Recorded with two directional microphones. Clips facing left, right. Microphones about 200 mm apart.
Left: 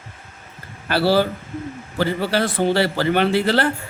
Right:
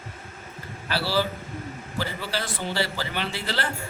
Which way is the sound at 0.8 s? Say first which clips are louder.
Left 8 dB; 55° left (ahead or behind).